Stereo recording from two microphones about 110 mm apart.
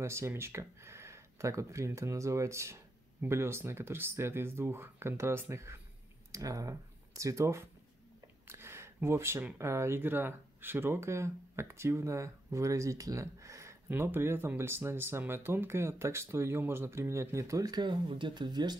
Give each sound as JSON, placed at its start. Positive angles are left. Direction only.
{"t": 0.0, "sound": "speech", "side_deg": -25}